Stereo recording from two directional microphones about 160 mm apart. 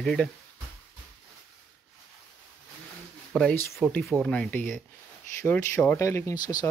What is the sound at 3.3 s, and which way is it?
Speech, 5° left (ahead or behind).